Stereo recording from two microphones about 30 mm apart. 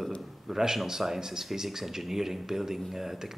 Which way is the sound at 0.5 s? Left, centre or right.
Centre.